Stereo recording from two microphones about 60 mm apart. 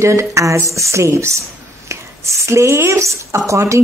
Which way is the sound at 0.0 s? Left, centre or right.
Right.